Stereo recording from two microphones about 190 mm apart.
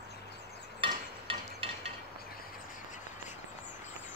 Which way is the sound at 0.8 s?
25° right (ahead or behind).